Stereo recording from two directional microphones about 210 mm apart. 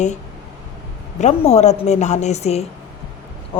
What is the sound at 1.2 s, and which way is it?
A woman's voice, 30° left (ahead or behind).